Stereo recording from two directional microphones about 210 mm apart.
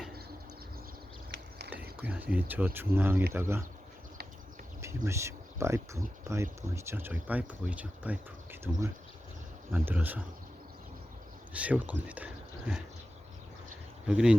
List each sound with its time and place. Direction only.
1.3 s a sound: 55° right (ahead or behind)
1.7 s speech: 10° right (ahead or behind)
5.0 s speech: 15° right (ahead or behind)
11.5 s speech: 5° right (ahead or behind)
14.1 s speech: 5° right (ahead or behind)